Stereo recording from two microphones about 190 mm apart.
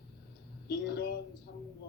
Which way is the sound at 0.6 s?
60° left (ahead or behind).